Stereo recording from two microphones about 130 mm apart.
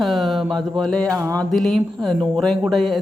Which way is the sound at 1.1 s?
25° right (ahead or behind).